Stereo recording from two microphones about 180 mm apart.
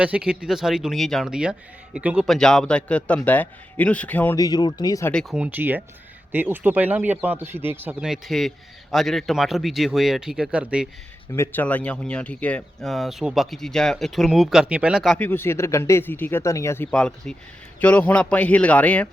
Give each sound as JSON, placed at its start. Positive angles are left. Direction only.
{"t": 0.0, "sound": "speech", "side_deg": -5}
{"t": 4.4, "sound": "speech", "side_deg": 20}
{"t": 5.1, "sound": "speech", "side_deg": -5}
{"t": 11.3, "sound": "speech", "side_deg": 10}